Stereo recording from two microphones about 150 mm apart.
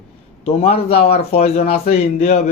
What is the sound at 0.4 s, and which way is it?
Speech, 45° left (ahead or behind).